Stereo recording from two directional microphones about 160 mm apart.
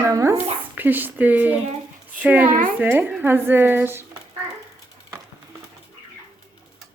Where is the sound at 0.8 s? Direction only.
10° right (ahead or behind).